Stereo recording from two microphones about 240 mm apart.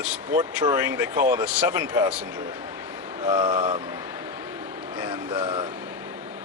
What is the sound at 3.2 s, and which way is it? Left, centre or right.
Speech, centre.